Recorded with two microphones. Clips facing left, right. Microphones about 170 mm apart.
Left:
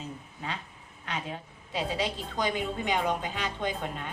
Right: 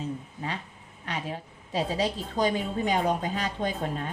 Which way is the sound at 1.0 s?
35° right (ahead or behind).